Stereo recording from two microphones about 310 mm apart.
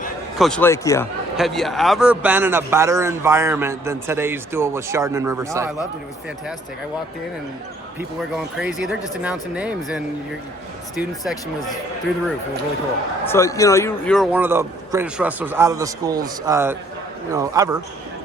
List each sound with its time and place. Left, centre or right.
0.3 s a man's voice: centre
8.5 s a man's voice: centre
11.3 s a man's voice: centre
13.2 s a man's voice: centre